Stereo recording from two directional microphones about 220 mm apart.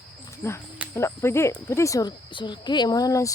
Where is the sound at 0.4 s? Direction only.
15° left (ahead or behind).